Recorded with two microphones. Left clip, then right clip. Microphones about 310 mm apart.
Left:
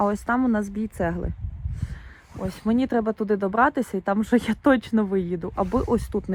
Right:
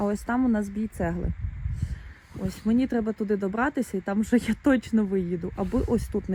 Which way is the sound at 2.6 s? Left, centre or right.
Left.